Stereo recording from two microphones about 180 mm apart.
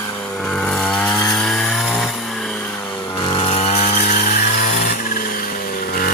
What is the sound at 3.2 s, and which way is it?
Chainsaw, 30° left (ahead or behind).